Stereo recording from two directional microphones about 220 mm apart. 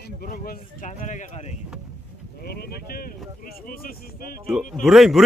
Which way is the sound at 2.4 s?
45° left (ahead or behind).